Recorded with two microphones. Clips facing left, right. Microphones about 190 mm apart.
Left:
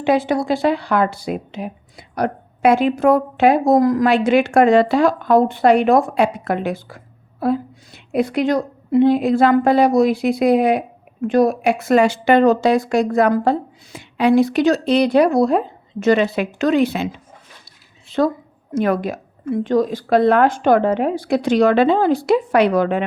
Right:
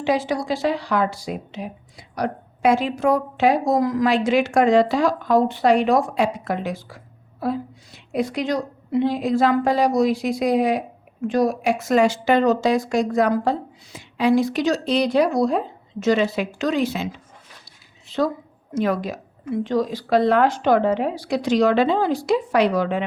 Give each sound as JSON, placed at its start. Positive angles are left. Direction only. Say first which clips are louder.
{"t": 0.0, "sound": "a woman's voice", "louder": "left 4 dB", "side_deg": 55}
{"t": 18.1, "sound": "a woman's voice", "louder": "left 4 dB", "side_deg": 55}